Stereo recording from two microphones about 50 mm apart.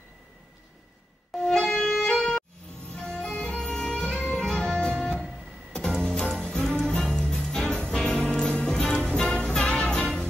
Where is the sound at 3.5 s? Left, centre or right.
Centre.